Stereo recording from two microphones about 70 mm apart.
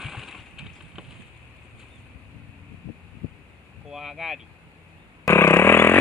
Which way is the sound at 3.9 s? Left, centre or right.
Centre.